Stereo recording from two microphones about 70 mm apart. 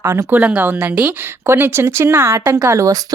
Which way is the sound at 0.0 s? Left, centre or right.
Right.